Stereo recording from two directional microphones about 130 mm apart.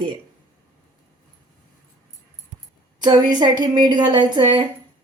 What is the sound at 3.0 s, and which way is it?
Speech, 35° right (ahead or behind).